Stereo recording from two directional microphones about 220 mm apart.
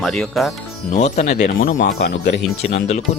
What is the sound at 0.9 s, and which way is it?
Speech, 30° left (ahead or behind).